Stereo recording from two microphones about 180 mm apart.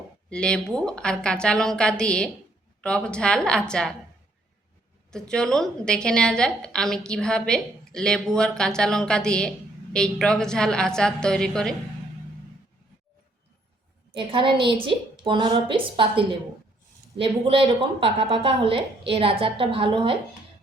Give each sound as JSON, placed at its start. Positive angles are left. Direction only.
{"t": 0.3, "sound": "a woman's voice", "side_deg": 5}
{"t": 5.1, "sound": "a woman's voice", "side_deg": 5}
{"t": 14.1, "sound": "a woman's voice", "side_deg": -30}